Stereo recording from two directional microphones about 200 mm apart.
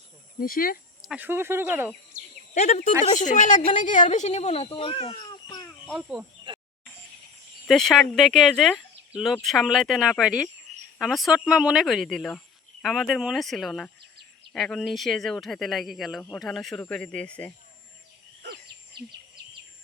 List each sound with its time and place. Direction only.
0.3 s speech: 45° left (ahead or behind)
1.0 s speech: 10° right (ahead or behind)
2.6 s speech: 30° left (ahead or behind)
6.0 s speech: 5° right (ahead or behind)
7.7 s speech: centre (ahead or behind)
18.4 s a sound: 55° right (ahead or behind)